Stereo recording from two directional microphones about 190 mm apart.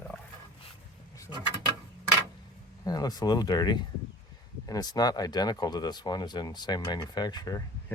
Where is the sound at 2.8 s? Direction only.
20° left (ahead or behind).